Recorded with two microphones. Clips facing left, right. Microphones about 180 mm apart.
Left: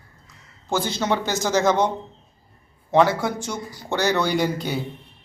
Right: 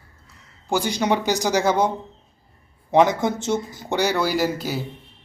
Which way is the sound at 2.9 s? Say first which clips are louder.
Right 1 dB; 20° right (ahead or behind).